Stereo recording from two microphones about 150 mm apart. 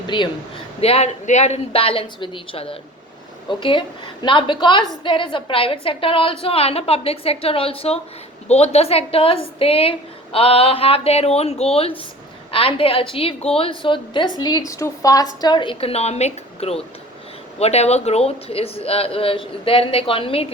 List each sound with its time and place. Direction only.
0.1 s speech: 30° left (ahead or behind)
0.8 s speech: 40° left (ahead or behind)